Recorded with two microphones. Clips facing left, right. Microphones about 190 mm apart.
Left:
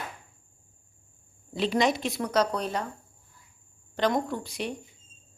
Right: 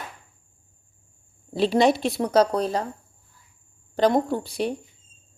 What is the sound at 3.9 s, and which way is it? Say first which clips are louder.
Speech: right 6 dB; 35° right (ahead or behind).